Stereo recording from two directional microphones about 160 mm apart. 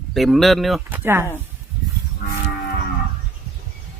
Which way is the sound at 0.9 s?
15° right (ahead or behind).